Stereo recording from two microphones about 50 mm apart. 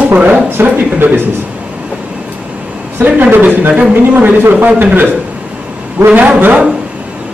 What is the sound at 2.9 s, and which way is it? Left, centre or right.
A man's voice, right.